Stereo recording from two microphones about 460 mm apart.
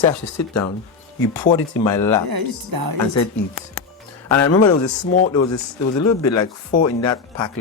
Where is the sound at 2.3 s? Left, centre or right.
Right.